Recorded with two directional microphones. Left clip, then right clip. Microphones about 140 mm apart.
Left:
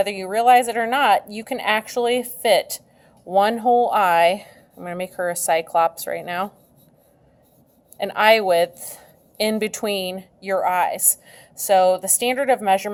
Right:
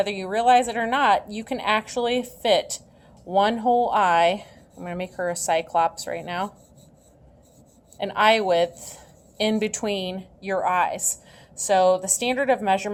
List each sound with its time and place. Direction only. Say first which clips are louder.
0.0 s a woman's voice: left 3 dB; 40° left (ahead or behind)
7.9 s a woman's voice: left 3 dB; 45° left (ahead or behind)